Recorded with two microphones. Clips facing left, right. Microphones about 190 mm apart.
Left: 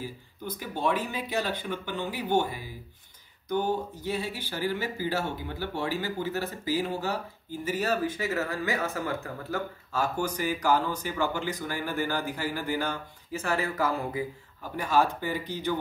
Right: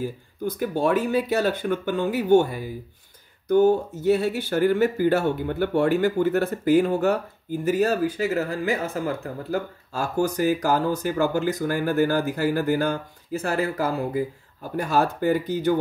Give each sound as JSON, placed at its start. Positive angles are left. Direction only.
{"t": 0.0, "sound": "speech", "side_deg": -45}
{"t": 7.6, "sound": "speech", "side_deg": -45}
{"t": 8.3, "sound": "speech", "side_deg": -30}